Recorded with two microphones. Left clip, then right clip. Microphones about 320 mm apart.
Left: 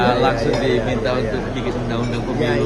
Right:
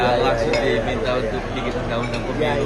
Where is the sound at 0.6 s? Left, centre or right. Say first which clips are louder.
Left 1 dB; centre.